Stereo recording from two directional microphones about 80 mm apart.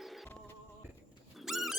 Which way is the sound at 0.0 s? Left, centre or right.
Centre.